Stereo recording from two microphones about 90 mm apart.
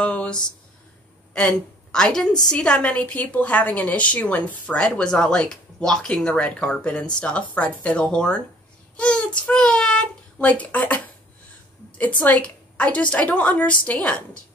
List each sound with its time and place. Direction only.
0.0 s a sound: 15° left (ahead or behind)
1.3 s a woman's voice: 10° left (ahead or behind)
12.0 s speech: 15° left (ahead or behind)